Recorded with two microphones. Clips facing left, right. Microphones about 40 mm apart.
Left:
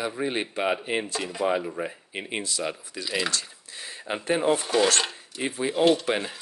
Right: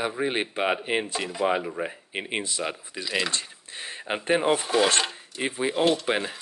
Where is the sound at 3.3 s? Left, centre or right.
Right.